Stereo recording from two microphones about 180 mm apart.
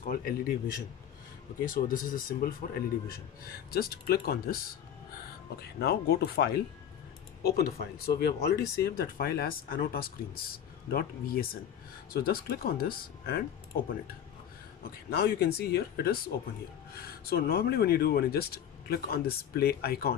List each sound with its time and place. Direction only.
0.0 s speech: 50° left (ahead or behind)
1.6 s speech: 50° left (ahead or behind)
5.6 s speech: 60° left (ahead or behind)
14.8 s speech: 60° left (ahead or behind)